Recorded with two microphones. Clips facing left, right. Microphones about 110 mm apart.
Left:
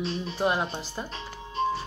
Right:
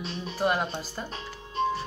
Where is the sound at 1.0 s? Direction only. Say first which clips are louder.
Left 4 dB; 10° left (ahead or behind).